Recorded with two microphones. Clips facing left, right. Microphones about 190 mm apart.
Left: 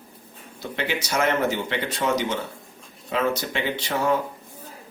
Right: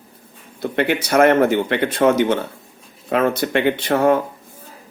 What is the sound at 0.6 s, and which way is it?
Speech, 55° right (ahead or behind).